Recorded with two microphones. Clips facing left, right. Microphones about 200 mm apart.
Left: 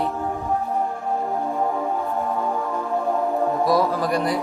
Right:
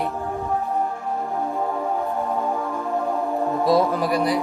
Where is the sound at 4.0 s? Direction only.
Centre (ahead or behind).